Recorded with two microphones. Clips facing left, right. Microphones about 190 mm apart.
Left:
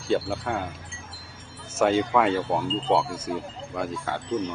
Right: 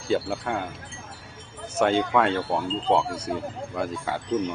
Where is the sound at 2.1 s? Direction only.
5° left (ahead or behind).